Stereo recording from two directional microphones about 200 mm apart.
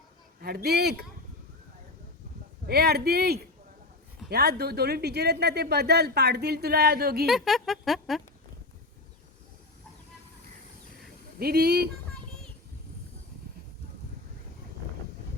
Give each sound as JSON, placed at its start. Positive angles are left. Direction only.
{"t": 0.4, "sound": "speech", "side_deg": -55}
{"t": 2.6, "sound": "speech", "side_deg": -50}
{"t": 7.3, "sound": "speech", "side_deg": 0}
{"t": 11.3, "sound": "speech", "side_deg": -50}